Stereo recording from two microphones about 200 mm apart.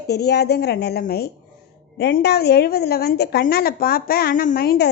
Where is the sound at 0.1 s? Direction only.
55° left (ahead or behind).